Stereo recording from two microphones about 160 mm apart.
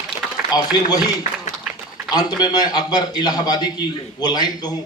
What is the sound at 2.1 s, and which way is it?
A man's voice, 25° left (ahead or behind).